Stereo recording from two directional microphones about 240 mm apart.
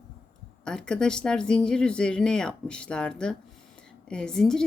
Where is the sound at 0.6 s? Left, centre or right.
Centre.